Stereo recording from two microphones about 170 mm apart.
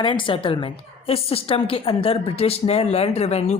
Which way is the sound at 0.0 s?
30° left (ahead or behind).